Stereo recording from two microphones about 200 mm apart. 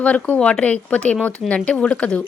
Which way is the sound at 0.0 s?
5° left (ahead or behind).